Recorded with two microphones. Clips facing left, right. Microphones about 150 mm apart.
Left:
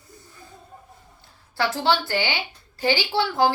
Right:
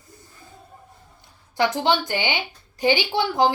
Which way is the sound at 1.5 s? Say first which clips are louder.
Right 2 dB; 20° right (ahead or behind).